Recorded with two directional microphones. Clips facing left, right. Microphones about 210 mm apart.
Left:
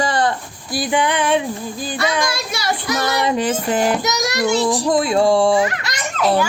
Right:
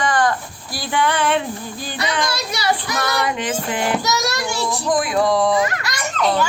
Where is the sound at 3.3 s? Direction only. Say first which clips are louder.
Left 5 dB; 40° left (ahead or behind).